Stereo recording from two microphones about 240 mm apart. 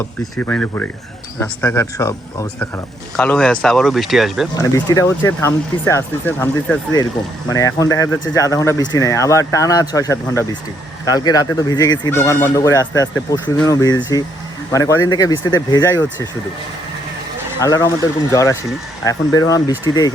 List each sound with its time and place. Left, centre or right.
0.3 s speech: centre
4.5 s speech: centre
17.6 s speech: centre